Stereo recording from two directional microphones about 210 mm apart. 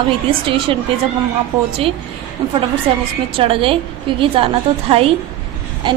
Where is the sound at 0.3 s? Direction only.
25° right (ahead or behind).